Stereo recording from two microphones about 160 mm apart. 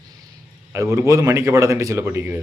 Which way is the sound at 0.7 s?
20° right (ahead or behind).